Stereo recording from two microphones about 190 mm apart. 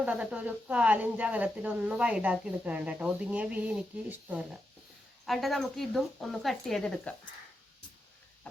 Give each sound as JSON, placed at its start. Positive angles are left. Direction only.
{"t": 0.0, "sound": "speech", "side_deg": -5}